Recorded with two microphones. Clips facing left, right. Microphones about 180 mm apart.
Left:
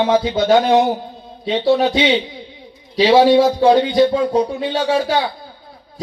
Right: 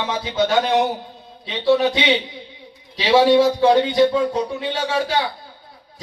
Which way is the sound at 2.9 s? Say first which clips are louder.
Left 3 dB; 45° left (ahead or behind).